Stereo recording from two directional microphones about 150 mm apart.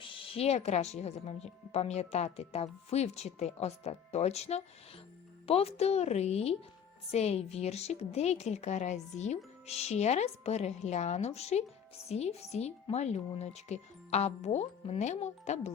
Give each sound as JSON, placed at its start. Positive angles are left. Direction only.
{"t": 0.3, "sound": "a woman's voice", "side_deg": 45}